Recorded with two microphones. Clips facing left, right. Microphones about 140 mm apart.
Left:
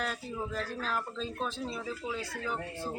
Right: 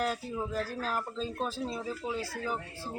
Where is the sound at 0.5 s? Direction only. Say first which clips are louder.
Right 1 dB; 40° right (ahead or behind).